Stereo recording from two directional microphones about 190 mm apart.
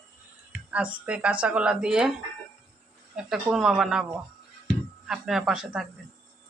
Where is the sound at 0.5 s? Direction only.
5° right (ahead or behind).